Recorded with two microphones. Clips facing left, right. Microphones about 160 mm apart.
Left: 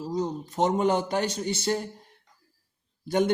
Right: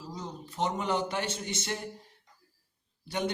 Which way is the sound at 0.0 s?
45° left (ahead or behind).